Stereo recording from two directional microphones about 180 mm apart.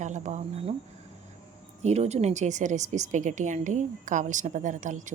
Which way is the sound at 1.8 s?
35° right (ahead or behind).